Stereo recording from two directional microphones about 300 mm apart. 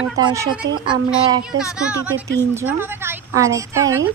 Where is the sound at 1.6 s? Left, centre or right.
Centre.